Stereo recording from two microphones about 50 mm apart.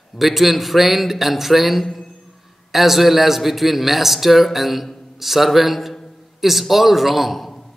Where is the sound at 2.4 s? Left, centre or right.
Centre.